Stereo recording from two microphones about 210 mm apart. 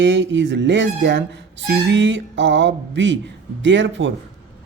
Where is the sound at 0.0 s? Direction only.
60° right (ahead or behind).